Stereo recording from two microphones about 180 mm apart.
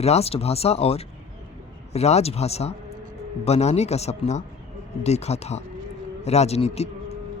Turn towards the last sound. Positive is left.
turn(degrees=35)  # may be behind; listen again after turning